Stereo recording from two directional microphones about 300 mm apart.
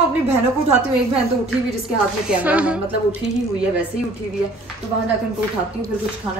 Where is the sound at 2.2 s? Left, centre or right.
Centre.